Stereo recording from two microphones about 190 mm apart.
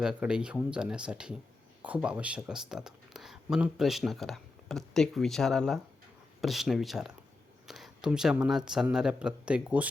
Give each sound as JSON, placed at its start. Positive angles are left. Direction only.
{"t": 0.0, "sound": "speech", "side_deg": -5}